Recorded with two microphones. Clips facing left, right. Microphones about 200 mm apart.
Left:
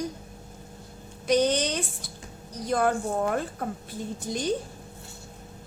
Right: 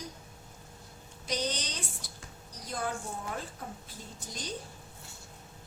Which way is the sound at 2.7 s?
65° left (ahead or behind).